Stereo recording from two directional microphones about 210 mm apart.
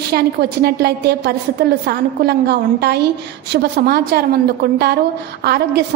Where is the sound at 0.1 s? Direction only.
50° right (ahead or behind).